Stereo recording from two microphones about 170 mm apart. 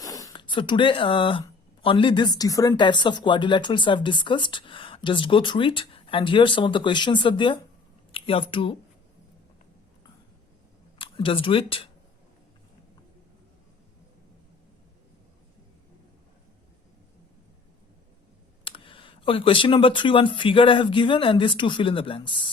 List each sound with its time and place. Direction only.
0.0 s speech: 20° left (ahead or behind)
10.9 s speech: 30° left (ahead or behind)
18.6 s speech: 30° left (ahead or behind)